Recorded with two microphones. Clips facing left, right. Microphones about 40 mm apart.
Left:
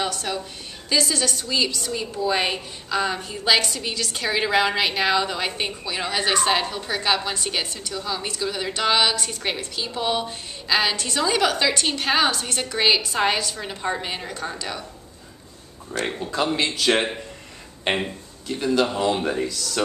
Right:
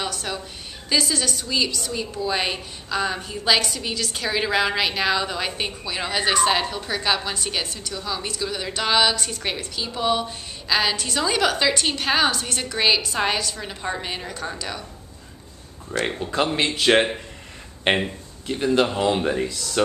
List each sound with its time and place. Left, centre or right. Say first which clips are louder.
0.0 s a sound: left 2 dB; centre
0.8 s a woman's voice: even; centre
15.9 s a woman's voice: right 2 dB; centre
16.5 s a man's voice: right 4 dB; right
17.9 s speech: right 3 dB; right
18.5 s a man's voice: right 1 dB; right